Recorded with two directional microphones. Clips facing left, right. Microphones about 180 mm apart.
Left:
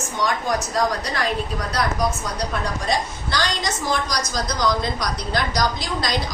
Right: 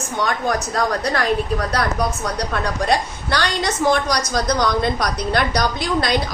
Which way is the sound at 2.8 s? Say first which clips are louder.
Right 4 dB; 60° right (ahead or behind).